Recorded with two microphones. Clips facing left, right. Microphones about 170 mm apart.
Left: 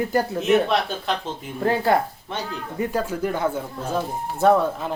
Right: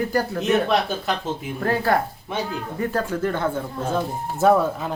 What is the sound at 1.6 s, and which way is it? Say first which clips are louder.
Speech: left 2 dB; 20° left (ahead or behind).